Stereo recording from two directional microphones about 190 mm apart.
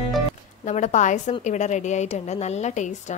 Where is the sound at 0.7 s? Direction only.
40° left (ahead or behind).